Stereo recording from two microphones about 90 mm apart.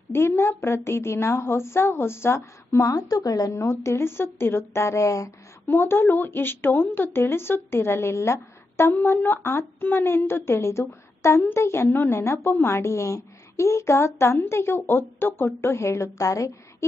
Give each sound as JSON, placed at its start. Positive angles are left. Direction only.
{"t": 0.1, "sound": "a woman's voice", "side_deg": 25}
{"t": 5.8, "sound": "a woman's voice", "side_deg": 25}